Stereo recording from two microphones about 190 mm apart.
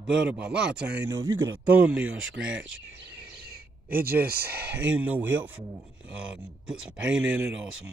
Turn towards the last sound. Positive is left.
turn(degrees=-75)  # may be behind; listen again after turning